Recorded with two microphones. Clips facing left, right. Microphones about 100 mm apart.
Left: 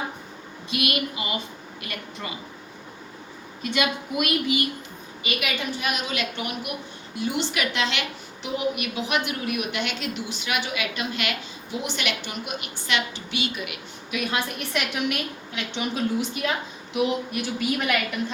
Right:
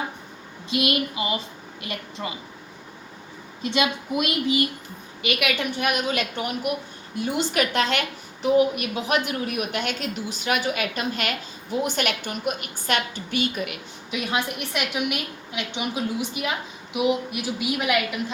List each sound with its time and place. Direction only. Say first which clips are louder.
0.7 s a woman's voice: right 3 dB; 25° right (ahead or behind)
3.6 s a woman's voice: right 2 dB; 25° right (ahead or behind)
5.2 s a woman's voice: right 4 dB; 60° right (ahead or behind)
6.3 s a woman's voice: right 4 dB; 40° right (ahead or behind)
14.1 s a woman's voice: right 1 dB; 20° right (ahead or behind)